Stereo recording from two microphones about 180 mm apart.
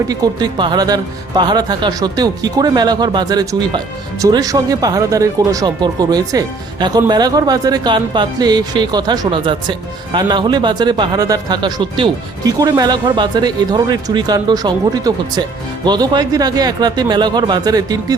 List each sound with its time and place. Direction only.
0.1 s speech: 25° right (ahead or behind)